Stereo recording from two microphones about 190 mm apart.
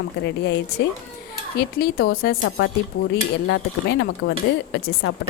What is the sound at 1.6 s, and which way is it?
Speech, 55° left (ahead or behind).